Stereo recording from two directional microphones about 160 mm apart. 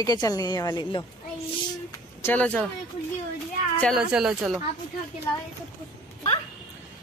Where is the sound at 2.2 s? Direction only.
10° left (ahead or behind).